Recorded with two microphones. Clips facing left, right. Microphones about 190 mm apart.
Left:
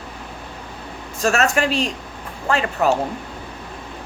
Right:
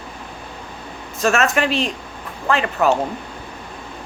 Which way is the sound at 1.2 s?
35° left (ahead or behind).